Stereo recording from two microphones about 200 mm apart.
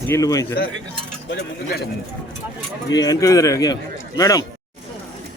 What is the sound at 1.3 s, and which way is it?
Speech, 55° left (ahead or behind).